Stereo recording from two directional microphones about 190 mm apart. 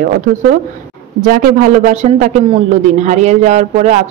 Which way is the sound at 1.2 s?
45° right (ahead or behind).